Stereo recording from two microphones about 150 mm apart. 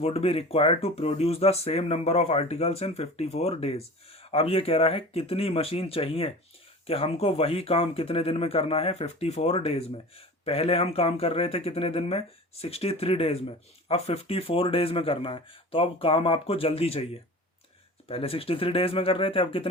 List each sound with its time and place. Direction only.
0.0 s speech: 40° left (ahead or behind)
18.1 s speech: 40° left (ahead or behind)